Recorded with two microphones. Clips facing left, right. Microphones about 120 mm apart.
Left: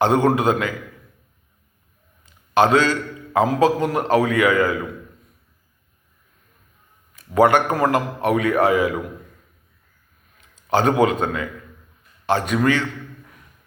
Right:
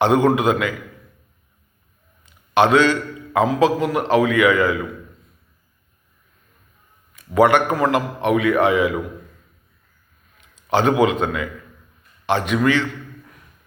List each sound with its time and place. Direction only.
0.0 s a man's voice: 35° left (ahead or behind)
2.6 s a man's voice: 35° left (ahead or behind)
7.3 s a man's voice: 35° left (ahead or behind)
10.7 s a man's voice: 40° left (ahead or behind)